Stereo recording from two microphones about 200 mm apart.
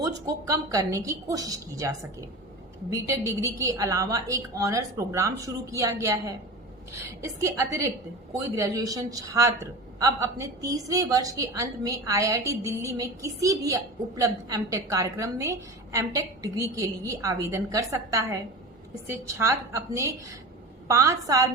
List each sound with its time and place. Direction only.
0.0 s a woman's voice: 15° right (ahead or behind)